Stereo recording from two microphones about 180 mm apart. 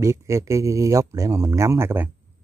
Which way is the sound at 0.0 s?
15° right (ahead or behind).